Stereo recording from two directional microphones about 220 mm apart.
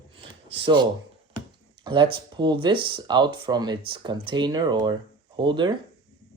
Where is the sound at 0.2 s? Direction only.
25° right (ahead or behind).